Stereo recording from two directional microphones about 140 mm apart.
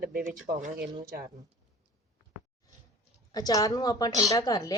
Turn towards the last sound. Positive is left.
turn(degrees=25)  # may be behind; listen again after turning